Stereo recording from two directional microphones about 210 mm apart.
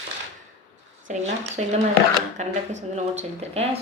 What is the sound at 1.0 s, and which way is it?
A woman's voice, 30° right (ahead or behind).